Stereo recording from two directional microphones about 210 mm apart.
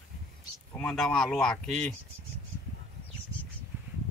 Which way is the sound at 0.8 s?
5° left (ahead or behind).